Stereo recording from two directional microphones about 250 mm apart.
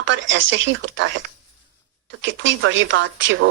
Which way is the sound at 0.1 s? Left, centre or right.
Right.